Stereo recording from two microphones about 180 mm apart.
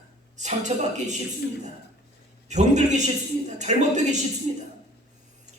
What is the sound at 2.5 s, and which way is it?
A man's voice, 40° right (ahead or behind).